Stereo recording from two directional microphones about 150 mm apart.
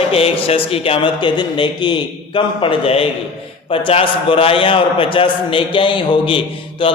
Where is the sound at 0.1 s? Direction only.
40° left (ahead or behind).